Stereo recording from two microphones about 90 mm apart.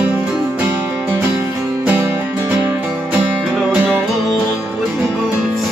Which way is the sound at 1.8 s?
20° right (ahead or behind).